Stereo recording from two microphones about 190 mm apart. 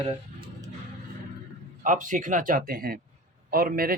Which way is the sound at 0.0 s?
30° right (ahead or behind).